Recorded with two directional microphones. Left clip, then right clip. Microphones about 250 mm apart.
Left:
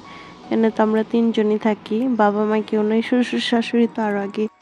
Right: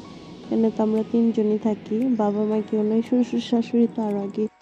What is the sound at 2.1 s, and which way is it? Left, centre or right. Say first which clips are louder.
Speech: left 9 dB; left.